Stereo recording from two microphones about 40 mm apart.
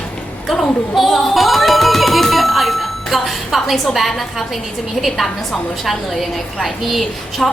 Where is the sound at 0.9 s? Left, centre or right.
Centre.